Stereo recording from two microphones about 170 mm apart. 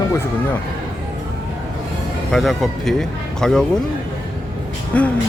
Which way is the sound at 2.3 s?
Centre (ahead or behind).